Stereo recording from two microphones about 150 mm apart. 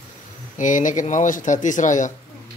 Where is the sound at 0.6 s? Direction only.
60° left (ahead or behind).